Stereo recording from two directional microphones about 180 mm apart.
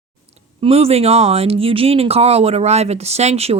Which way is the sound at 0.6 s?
35° right (ahead or behind).